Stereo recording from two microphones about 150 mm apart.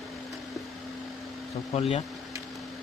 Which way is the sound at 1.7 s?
40° left (ahead or behind).